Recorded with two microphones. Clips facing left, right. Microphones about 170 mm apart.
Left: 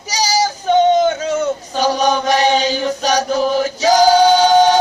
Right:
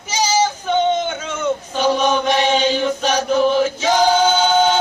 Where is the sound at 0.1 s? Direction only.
35° left (ahead or behind).